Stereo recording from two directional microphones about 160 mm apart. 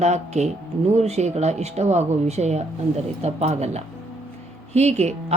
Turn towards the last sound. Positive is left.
turn(degrees=-45)  # may be behind; listen again after turning